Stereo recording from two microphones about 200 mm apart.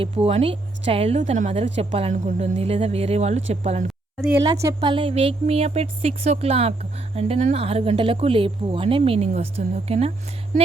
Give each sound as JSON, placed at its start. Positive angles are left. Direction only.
{"t": 0.0, "sound": "a woman's voice", "side_deg": -30}